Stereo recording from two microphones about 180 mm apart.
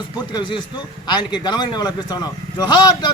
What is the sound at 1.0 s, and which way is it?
A man's voice, 25° left (ahead or behind).